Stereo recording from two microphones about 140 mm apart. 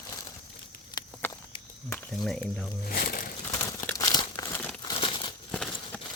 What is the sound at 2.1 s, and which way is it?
Speech, centre (ahead or behind).